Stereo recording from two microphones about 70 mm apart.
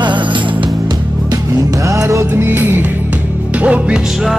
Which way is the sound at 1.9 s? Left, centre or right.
Right.